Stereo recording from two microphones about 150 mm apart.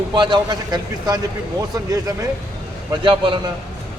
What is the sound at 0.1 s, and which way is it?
A man's voice, 30° right (ahead or behind).